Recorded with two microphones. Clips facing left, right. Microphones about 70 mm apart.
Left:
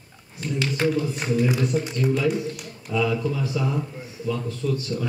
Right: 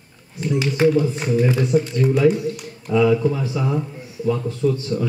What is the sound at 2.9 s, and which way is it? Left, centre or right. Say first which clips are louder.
Speech: right 7 dB; right.